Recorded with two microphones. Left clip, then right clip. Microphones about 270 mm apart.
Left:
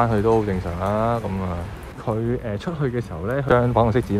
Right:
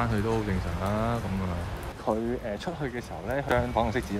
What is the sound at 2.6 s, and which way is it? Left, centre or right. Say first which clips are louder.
Speech: left 7 dB; right.